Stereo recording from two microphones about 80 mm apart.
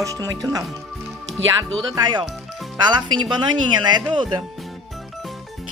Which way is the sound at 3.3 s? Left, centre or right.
Right.